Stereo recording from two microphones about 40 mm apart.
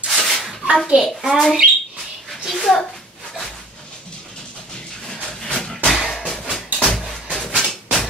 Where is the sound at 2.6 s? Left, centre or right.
Centre.